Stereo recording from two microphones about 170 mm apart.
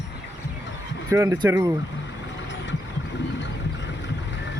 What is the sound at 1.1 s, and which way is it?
Speech, 20° right (ahead or behind).